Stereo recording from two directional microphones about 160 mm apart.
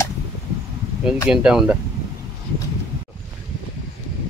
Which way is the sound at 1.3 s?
5° right (ahead or behind).